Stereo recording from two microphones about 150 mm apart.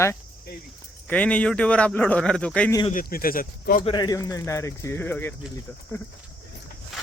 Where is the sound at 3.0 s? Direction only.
75° left (ahead or behind).